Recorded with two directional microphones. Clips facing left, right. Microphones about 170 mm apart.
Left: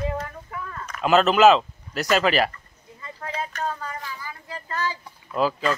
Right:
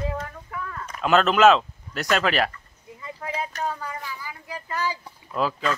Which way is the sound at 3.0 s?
15° right (ahead or behind).